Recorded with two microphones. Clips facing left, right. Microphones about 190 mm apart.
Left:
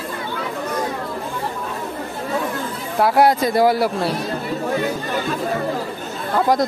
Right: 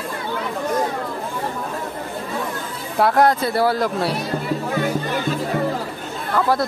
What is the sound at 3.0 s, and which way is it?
Speech, 10° left (ahead or behind).